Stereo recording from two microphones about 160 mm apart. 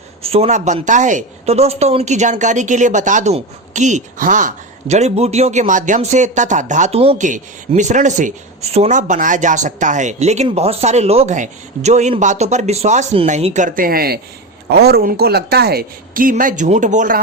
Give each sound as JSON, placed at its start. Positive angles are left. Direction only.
{"t": 0.2, "sound": "a woman's voice", "side_deg": -40}
{"t": 7.7, "sound": "a woman's voice", "side_deg": -50}
{"t": 14.7, "sound": "speech", "side_deg": -85}